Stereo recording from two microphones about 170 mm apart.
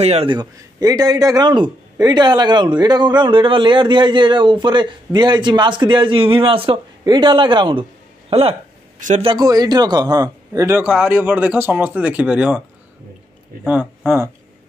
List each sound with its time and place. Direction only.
0.0 s a man's voice: 35° right (ahead or behind)
0.4 s a man's voice: 20° right (ahead or behind)
10.8 s speech: 10° right (ahead or behind)
13.7 s speech: 10° right (ahead or behind)